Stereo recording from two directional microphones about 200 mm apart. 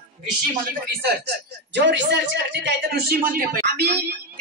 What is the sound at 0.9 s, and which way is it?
A woman's voice, 55° right (ahead or behind).